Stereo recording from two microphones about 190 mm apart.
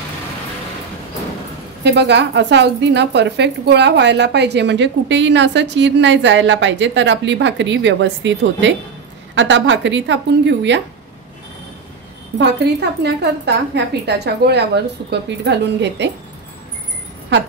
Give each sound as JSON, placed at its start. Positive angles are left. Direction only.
{"t": 1.8, "sound": "a woman's voice", "side_deg": -65}
{"t": 13.0, "sound": "a woman's voice", "side_deg": -60}